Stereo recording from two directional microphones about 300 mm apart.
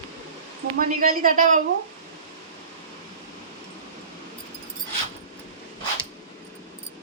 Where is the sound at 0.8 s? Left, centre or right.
Right.